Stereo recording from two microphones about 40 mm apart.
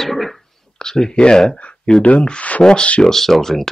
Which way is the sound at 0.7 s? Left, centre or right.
Centre.